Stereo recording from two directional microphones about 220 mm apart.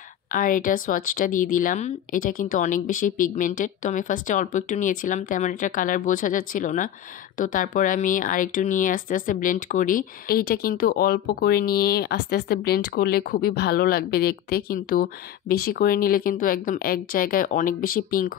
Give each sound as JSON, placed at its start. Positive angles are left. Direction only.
{"t": 0.3, "sound": "speech", "side_deg": 40}